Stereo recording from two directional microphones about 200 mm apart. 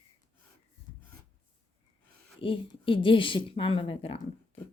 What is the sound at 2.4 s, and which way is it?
Speech, 25° left (ahead or behind).